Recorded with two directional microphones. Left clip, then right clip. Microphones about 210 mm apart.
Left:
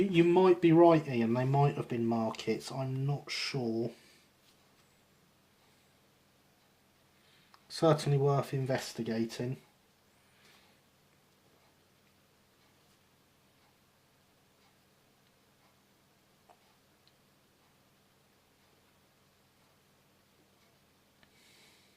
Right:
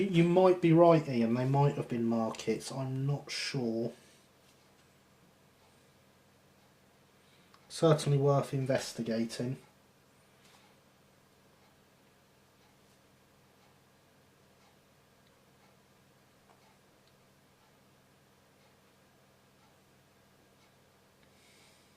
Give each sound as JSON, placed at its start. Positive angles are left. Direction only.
{"t": 0.1, "sound": "speech", "side_deg": 35}
{"t": 7.7, "sound": "speech", "side_deg": 35}